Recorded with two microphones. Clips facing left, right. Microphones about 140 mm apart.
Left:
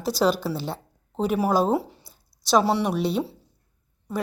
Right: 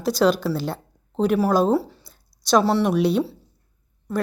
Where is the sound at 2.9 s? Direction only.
Centre (ahead or behind).